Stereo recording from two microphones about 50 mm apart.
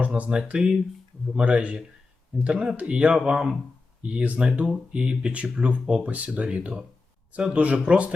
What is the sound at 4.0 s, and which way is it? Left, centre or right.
Speech, right.